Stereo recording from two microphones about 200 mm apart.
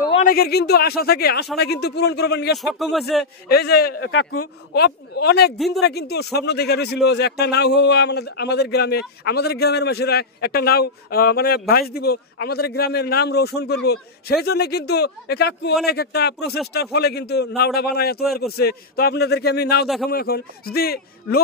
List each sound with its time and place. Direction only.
0.2 s speech: 50° left (ahead or behind)
2.6 s speech: centre (ahead or behind)
3.5 s speech: 50° left (ahead or behind)
4.0 s speech: 75° left (ahead or behind)
4.7 s speech: 50° left (ahead or behind)